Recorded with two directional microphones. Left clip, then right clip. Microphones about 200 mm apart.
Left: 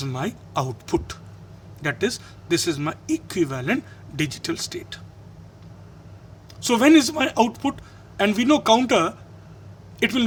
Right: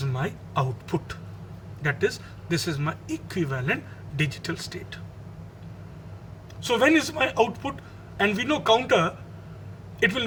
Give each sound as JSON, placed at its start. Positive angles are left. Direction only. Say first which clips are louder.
{"t": 0.0, "sound": "a man's voice", "louder": "left 2 dB", "side_deg": 55}
{"t": 6.7, "sound": "a man's voice", "louder": "left 4 dB", "side_deg": 50}